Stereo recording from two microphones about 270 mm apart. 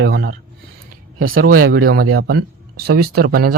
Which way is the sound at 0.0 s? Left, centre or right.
Right.